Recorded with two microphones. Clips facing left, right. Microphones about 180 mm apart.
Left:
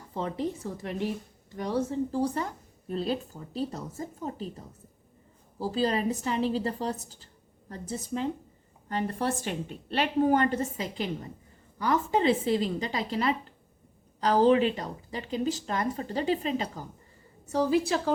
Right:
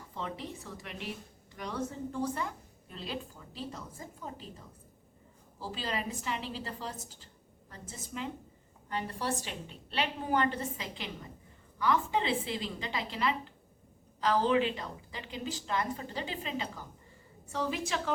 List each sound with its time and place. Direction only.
0.1 s a woman's voice: 40° left (ahead or behind)
5.5 s a woman's voice: 40° left (ahead or behind)